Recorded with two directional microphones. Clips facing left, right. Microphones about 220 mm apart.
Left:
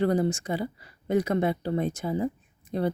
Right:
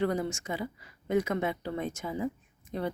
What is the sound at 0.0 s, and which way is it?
Speech, 35° left (ahead or behind).